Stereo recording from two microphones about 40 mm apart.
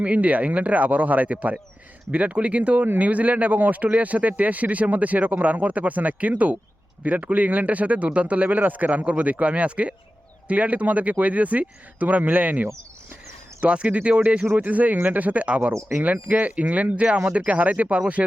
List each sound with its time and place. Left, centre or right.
0.0 s speech: right
13.6 s speech: right